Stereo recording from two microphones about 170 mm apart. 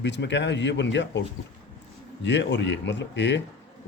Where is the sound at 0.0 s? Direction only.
90° left.